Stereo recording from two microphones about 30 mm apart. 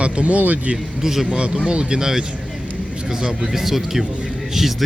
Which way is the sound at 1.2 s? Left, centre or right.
Right.